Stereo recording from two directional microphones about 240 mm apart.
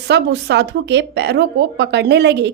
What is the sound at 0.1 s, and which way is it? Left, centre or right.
Speech, right.